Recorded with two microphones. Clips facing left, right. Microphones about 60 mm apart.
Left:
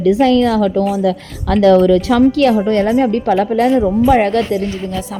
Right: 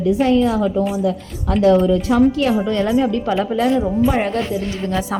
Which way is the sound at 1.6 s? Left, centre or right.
Left.